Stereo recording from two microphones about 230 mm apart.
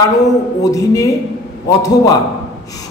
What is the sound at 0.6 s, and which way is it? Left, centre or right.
A man's voice, centre.